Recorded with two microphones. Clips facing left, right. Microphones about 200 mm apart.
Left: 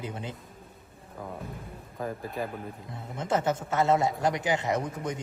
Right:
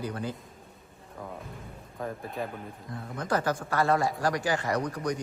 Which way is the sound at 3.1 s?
25° left (ahead or behind).